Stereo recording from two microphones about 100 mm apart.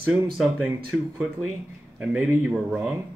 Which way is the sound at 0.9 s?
10° right (ahead or behind).